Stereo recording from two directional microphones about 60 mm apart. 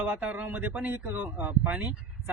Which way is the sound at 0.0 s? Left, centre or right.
Right.